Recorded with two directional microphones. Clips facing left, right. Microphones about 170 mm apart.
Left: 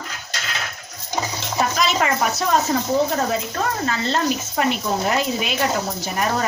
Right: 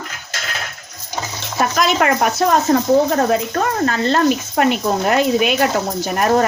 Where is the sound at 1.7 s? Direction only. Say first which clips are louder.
Right 6 dB; 60° right (ahead or behind).